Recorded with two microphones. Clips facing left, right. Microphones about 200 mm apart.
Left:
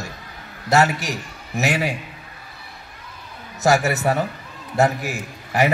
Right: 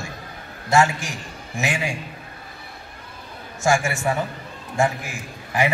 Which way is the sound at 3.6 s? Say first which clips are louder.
Left 3 dB; 40° left (ahead or behind).